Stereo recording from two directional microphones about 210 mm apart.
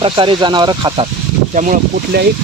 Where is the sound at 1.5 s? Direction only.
40° right (ahead or behind).